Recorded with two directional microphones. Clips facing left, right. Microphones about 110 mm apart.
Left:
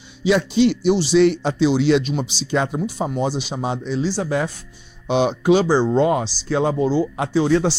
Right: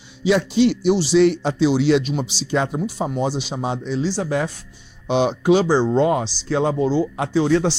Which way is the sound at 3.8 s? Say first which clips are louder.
Even; 15° left (ahead or behind).